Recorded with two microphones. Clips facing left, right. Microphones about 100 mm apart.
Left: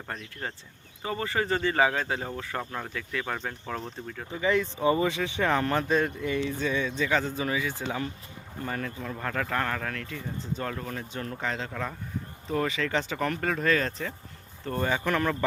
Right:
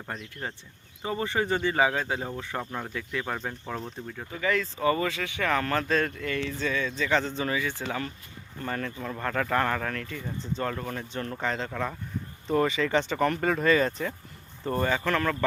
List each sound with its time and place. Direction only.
1.0 s speech: 20° right (ahead or behind)
2.6 s speech: 5° right (ahead or behind)
2.9 s speech: 15° right (ahead or behind)
4.3 s speech: 20° left (ahead or behind); by 14.8 s 5° right (ahead or behind)
14.8 s speech: 10° left (ahead or behind)